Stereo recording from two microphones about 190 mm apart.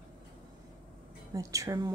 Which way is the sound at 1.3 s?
15° right (ahead or behind).